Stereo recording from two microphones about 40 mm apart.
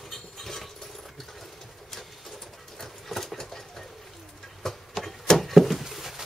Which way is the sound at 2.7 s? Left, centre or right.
Centre.